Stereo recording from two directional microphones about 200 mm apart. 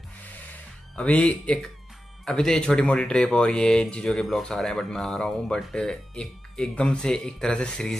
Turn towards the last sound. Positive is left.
turn(degrees=5)  # may be behind; listen again after turning